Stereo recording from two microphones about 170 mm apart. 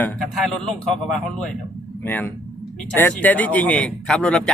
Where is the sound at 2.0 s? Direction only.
10° left (ahead or behind).